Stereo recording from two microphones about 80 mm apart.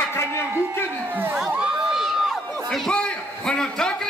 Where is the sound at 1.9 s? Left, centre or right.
Centre.